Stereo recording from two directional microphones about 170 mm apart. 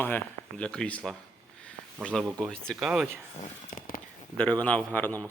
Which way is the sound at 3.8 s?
55° left (ahead or behind).